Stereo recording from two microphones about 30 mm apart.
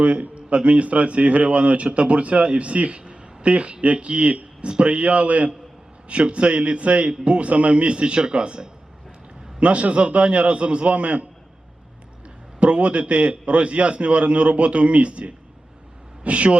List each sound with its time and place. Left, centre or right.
0.0 s a man's voice: right
3.0 s a man's voice: right
12.5 s a man's voice: right